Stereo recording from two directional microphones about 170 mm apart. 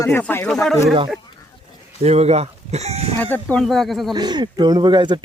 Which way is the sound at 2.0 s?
40° right (ahead or behind).